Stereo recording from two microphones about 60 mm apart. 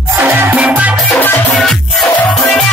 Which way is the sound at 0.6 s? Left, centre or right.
Right.